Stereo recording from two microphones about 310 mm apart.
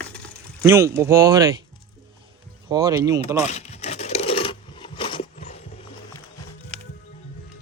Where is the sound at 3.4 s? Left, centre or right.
Left.